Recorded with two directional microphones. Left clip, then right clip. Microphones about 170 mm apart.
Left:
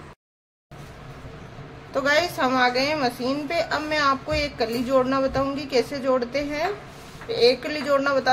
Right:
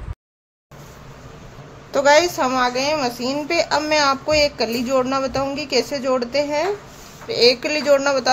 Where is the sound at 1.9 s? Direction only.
45° right (ahead or behind).